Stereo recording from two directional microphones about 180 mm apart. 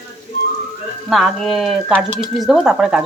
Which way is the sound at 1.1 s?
Centre (ahead or behind).